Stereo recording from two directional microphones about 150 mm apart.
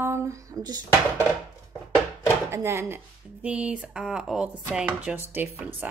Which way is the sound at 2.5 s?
15° right (ahead or behind).